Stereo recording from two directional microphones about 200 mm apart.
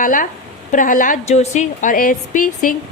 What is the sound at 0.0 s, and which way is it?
A woman's voice, 40° left (ahead or behind).